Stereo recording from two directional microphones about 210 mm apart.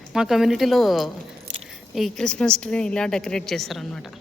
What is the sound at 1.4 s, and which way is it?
Keys jangling, 30° right (ahead or behind).